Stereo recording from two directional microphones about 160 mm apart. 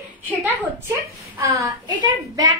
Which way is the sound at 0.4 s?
15° right (ahead or behind).